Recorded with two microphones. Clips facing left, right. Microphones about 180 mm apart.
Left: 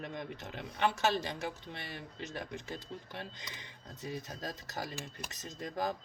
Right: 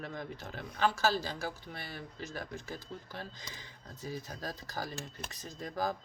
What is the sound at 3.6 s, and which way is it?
Speech, 65° left (ahead or behind).